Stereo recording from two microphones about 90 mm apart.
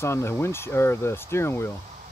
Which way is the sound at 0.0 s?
30° left (ahead or behind).